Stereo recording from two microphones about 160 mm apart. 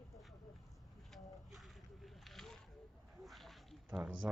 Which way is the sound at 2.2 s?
Centre (ahead or behind).